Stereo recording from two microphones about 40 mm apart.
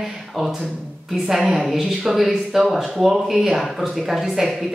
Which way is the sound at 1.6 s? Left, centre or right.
Centre.